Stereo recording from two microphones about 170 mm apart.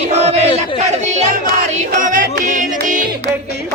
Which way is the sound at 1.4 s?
55° right (ahead or behind).